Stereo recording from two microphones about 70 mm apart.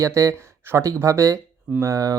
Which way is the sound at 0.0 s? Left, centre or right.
Right.